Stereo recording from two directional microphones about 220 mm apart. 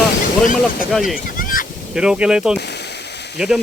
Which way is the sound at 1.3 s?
40° left (ahead or behind).